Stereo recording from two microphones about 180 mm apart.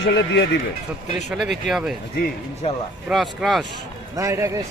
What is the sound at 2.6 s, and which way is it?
Speech, 35° left (ahead or behind).